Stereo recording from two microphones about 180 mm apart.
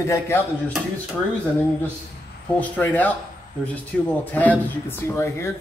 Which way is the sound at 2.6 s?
10° left (ahead or behind).